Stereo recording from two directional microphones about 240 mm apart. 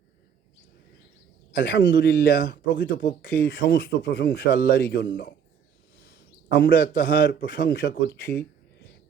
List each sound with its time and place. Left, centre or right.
1.5 s a man's voice: left